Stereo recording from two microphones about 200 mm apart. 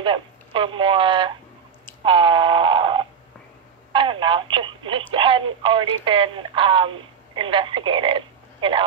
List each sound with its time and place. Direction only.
0.0 s speech: 25° right (ahead or behind)
2.0 s snoring: 25° right (ahead or behind)
3.9 s speech: 25° right (ahead or behind)